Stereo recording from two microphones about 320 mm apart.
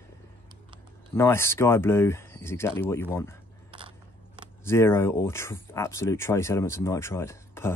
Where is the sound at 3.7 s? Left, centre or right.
Centre.